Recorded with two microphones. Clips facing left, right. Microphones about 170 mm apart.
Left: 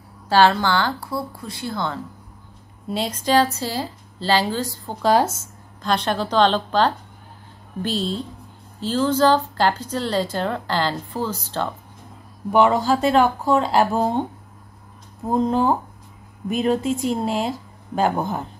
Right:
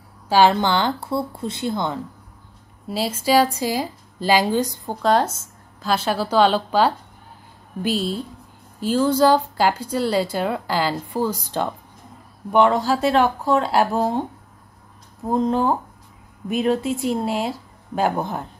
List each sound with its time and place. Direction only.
0.3 s speech: 15° right (ahead or behind)
2.9 s a woman's voice: 5° right (ahead or behind)
5.0 s a woman's voice: 5° left (ahead or behind); by 11.7 s 15° right (ahead or behind)
12.4 s speech: 5° left (ahead or behind)
15.2 s speech: centre (ahead or behind)